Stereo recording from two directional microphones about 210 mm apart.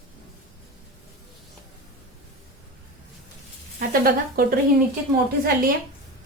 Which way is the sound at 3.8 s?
45° right (ahead or behind).